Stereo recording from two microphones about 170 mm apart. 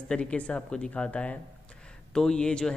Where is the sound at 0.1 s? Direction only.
5° left (ahead or behind).